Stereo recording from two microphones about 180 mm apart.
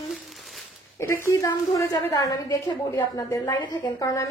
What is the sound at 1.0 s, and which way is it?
A woman's voice, 15° left (ahead or behind).